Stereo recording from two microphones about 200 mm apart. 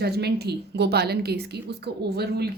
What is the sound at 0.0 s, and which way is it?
A woman's voice, 55° right (ahead or behind).